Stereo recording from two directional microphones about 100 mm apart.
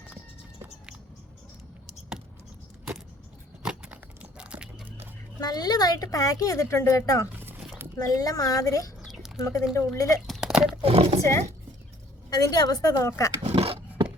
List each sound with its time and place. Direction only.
3.6 s a sound: 10° right (ahead or behind)
5.4 s a woman's voice: 40° left (ahead or behind)
9.0 s a sound: 5° right (ahead or behind)
9.4 s a woman's voice: 30° left (ahead or behind)
10.2 s a sound: 5° right (ahead or behind)
10.8 s speech: 85° right
11.2 s speech: 30° left (ahead or behind)
12.3 s a woman's voice: 40° left (ahead or behind)
13.4 s dog: 90° right